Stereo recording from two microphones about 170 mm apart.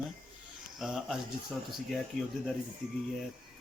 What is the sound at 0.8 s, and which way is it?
Speech, 5° right (ahead or behind).